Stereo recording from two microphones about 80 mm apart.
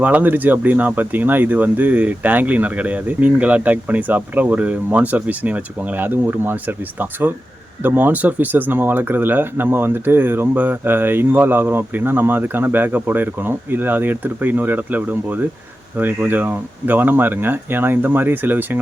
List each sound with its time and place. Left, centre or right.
0.0 s speech: right